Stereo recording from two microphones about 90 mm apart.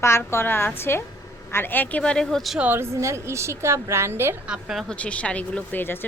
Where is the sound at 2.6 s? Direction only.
25° right (ahead or behind).